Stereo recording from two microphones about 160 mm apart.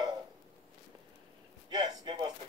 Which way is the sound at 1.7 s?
25° right (ahead or behind).